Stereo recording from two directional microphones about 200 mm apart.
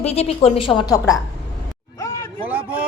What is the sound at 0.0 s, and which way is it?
A woman's voice, 30° left (ahead or behind).